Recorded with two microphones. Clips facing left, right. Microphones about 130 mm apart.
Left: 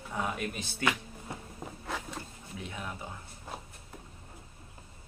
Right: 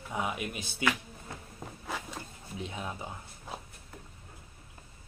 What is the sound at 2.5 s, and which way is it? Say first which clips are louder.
Speech: right 2 dB; 20° right (ahead or behind).